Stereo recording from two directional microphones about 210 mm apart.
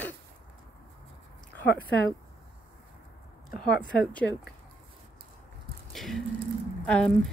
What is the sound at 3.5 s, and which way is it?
Speech, 50° left (ahead or behind).